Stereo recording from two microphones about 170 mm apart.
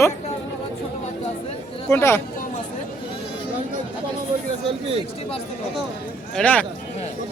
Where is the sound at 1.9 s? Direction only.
15° left (ahead or behind).